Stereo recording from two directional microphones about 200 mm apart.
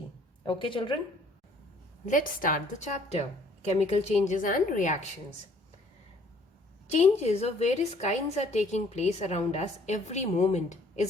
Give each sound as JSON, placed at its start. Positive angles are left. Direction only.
{"t": 0.4, "sound": "a woman's voice", "side_deg": 25}
{"t": 2.0, "sound": "a woman's voice", "side_deg": 45}
{"t": 6.9, "sound": "a woman's voice", "side_deg": 35}